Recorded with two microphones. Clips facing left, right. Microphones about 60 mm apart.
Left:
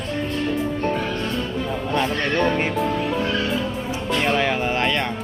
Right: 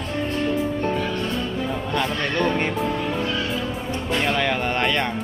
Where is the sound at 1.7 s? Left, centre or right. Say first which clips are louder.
Left 4 dB; centre.